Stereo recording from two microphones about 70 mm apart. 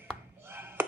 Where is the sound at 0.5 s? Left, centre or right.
Right.